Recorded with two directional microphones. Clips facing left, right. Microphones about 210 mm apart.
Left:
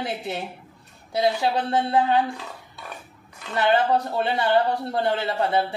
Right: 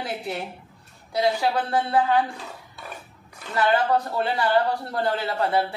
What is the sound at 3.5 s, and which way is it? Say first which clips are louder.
Speech: left 1 dB; 25° left (ahead or behind).